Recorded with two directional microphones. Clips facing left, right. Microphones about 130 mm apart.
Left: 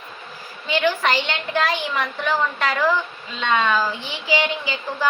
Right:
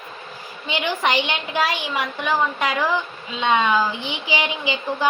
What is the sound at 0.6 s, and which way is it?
A woman's voice, 20° right (ahead or behind).